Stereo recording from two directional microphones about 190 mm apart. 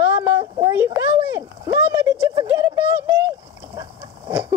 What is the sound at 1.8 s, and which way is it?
Speech, 15° right (ahead or behind).